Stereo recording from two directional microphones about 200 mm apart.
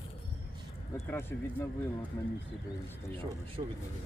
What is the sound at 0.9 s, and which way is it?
Speech, 10° left (ahead or behind).